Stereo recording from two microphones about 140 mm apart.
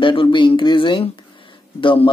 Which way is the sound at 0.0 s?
40° left (ahead or behind).